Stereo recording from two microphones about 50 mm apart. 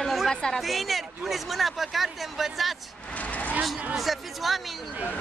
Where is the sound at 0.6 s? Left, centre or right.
Centre.